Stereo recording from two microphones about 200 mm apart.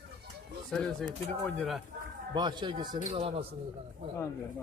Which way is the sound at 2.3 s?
20° right (ahead or behind).